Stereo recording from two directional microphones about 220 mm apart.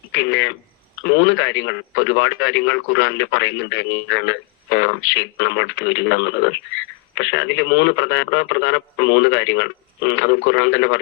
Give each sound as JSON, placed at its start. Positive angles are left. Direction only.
{"t": 0.1, "sound": "radio", "side_deg": 55}
{"t": 1.0, "sound": "speech", "side_deg": 55}